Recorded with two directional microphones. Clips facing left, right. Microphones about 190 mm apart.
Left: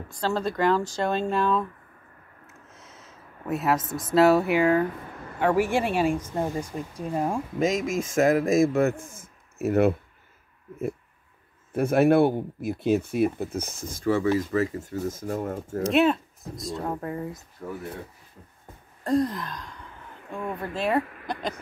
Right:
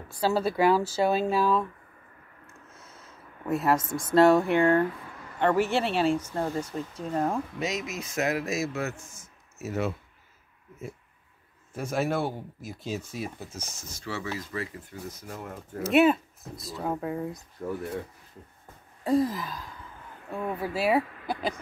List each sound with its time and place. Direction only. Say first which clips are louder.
0.1 s speech: right 1 dB; 10° right (ahead or behind)
2.4 s a sound: left 1 dB; centre (ahead or behind)
5.4 s speech: left 2 dB; 10° left (ahead or behind)
7.5 s speech: left 8 dB; 50° left (ahead or behind)
11.7 s speech: left 9 dB; 60° left (ahead or behind)
15.8 s speech: right 1 dB; 5° right (ahead or behind)
19.0 s speech: left 1 dB; 5° right (ahead or behind)